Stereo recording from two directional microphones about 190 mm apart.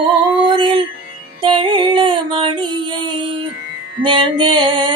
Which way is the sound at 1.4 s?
25° right (ahead or behind).